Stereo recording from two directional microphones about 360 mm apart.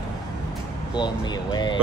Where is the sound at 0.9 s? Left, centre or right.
Centre.